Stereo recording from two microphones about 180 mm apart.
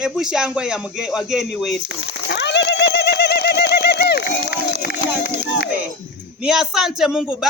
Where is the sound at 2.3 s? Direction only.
75° left (ahead or behind).